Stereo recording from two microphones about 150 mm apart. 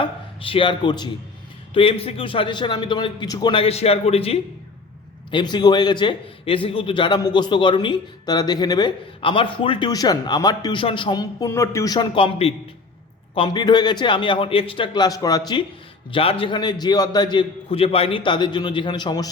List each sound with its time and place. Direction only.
0.0 s a man's voice: 35° left (ahead or behind)
3.5 s a man's voice: 40° left (ahead or behind)
5.3 s a man's voice: 30° left (ahead or behind)
12.1 s a man's voice: 40° left (ahead or behind)